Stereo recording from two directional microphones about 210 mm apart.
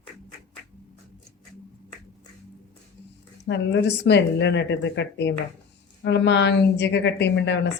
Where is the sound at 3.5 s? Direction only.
55° left (ahead or behind).